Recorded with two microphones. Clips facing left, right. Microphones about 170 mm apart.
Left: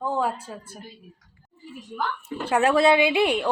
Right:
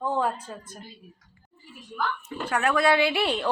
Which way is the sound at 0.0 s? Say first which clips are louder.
Left 1 dB; 5° left (ahead or behind).